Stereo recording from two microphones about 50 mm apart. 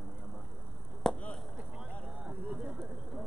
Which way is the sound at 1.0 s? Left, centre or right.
Centre.